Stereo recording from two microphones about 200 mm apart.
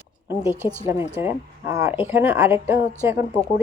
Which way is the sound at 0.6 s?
10° right (ahead or behind).